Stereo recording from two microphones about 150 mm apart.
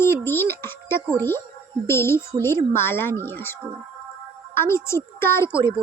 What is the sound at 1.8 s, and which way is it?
A woman's voice, 15° left (ahead or behind).